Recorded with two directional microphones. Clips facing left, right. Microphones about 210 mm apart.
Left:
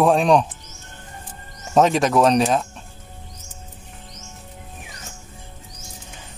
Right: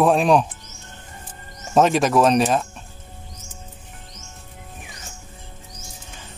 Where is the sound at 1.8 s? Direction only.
Centre (ahead or behind).